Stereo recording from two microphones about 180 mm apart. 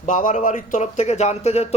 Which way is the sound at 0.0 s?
45° left (ahead or behind).